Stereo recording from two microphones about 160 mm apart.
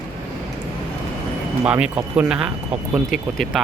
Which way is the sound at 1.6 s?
5° right (ahead or behind).